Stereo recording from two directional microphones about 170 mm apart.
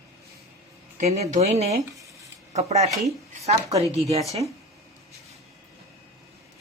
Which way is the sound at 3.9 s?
40° right (ahead or behind).